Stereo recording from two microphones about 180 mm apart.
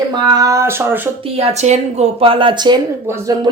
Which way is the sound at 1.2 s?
35° right (ahead or behind).